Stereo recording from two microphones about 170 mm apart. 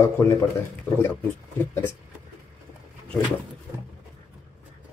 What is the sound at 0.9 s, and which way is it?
Speech, 10° left (ahead or behind).